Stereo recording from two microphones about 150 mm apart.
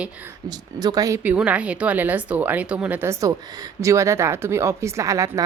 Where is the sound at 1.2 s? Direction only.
10° right (ahead or behind).